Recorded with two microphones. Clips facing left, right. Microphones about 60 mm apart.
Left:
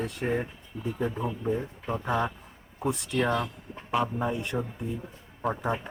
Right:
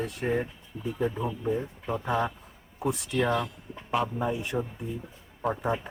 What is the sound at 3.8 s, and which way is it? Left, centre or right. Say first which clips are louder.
Speech: even; centre.